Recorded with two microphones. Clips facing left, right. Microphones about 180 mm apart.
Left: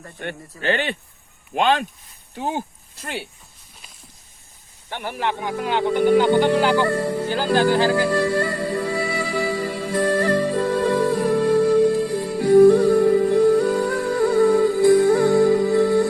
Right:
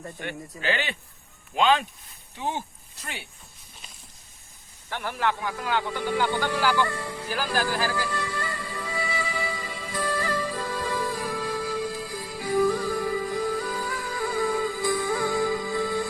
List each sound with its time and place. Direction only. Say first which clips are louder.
0.6 s speech: left 6 dB; 55° left (ahead or behind)
4.9 s speech: left 2 dB; 20° left (ahead or behind)
6.8 s speech: left 11 dB; 60° left (ahead or behind)
7.3 s speech: left 8 dB; 25° left (ahead or behind)
7.9 s music: left 11 dB; 65° left (ahead or behind)
8.4 s music: left 11 dB; 40° left (ahead or behind)
9.0 s music: left 8 dB; 65° left (ahead or behind)
10.4 s music: left 10 dB; 40° left (ahead or behind)
10.7 s music: left 10 dB; 60° left (ahead or behind)